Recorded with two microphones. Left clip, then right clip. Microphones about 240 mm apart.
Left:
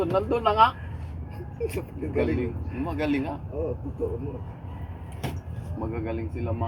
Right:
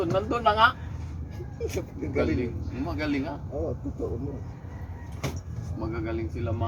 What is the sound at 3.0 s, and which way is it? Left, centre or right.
Speech, centre.